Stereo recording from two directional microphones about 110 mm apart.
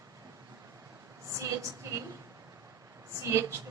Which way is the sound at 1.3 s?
30° right (ahead or behind).